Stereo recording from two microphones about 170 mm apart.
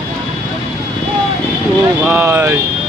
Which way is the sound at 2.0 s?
15° right (ahead or behind).